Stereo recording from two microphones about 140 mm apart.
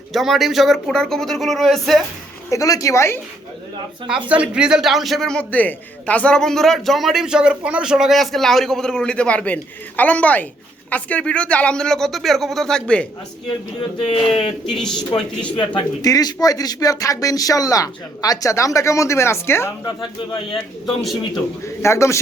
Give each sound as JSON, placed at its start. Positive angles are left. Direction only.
{"t": 0.1, "sound": "a man's voice", "side_deg": 0}
{"t": 2.5, "sound": "speech", "side_deg": 25}
{"t": 4.3, "sound": "a man's voice", "side_deg": -5}
{"t": 14.7, "sound": "a man's voice", "side_deg": 5}
{"t": 15.5, "sound": "speech", "side_deg": 30}
{"t": 20.8, "sound": "a man's voice", "side_deg": 0}
{"t": 21.3, "sound": "speech", "side_deg": 20}